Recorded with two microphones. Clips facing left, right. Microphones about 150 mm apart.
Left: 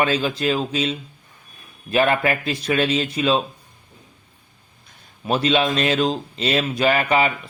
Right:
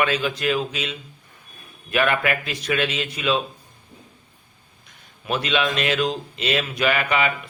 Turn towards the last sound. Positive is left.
turn(degrees=35)  # may be behind; listen again after turning